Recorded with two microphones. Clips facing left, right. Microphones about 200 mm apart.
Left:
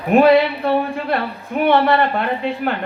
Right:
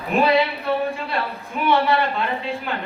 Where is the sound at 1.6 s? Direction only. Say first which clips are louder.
Left 4 dB; 55° left (ahead or behind).